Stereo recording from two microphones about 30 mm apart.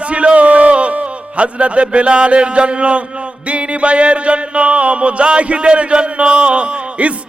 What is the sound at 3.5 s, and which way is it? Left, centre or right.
Music, right.